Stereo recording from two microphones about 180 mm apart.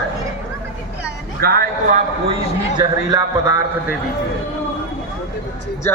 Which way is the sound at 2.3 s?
25° right (ahead or behind).